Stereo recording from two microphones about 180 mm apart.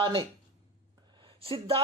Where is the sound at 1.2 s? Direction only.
30° right (ahead or behind).